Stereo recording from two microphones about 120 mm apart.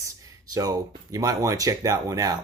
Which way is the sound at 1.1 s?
30° right (ahead or behind).